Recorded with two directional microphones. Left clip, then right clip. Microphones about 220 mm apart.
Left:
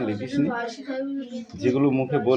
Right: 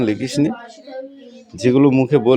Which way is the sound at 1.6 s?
50° right (ahead or behind).